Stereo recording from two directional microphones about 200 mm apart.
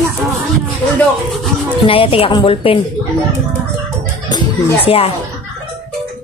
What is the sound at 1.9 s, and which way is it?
Speech, 25° left (ahead or behind).